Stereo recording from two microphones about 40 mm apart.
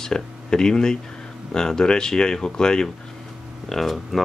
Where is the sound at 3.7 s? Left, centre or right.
Centre.